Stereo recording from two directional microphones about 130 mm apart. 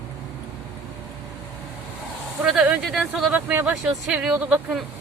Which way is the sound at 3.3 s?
15° right (ahead or behind).